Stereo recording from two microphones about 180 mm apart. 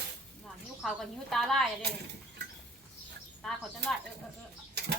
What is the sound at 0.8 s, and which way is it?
Speech, centre (ahead or behind).